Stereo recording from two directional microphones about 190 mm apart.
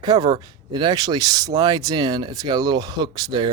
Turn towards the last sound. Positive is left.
turn(degrees=-20)  # may be behind; listen again after turning